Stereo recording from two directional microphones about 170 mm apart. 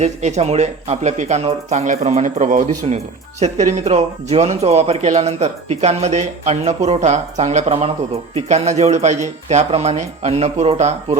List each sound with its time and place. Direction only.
0.0 s speech: 40° right (ahead or behind)